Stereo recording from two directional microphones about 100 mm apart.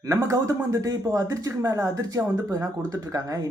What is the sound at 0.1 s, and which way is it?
Speech, 35° right (ahead or behind).